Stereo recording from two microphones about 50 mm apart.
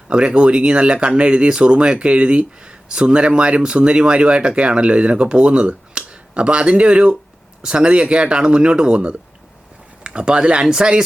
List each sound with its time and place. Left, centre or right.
0.1 s speech: centre